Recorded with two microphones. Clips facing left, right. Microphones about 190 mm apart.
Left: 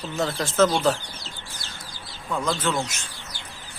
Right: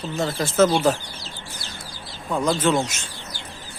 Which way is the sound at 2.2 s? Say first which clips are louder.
Right 5 dB; 15° right (ahead or behind).